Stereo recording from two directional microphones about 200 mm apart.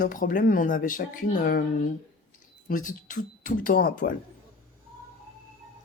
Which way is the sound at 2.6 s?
40° left (ahead or behind).